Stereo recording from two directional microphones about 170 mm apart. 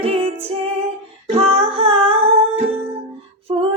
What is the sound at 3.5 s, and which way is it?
Female singing, 30° right (ahead or behind).